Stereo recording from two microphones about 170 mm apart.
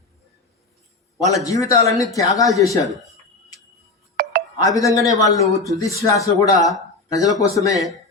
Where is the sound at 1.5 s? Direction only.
20° left (ahead or behind).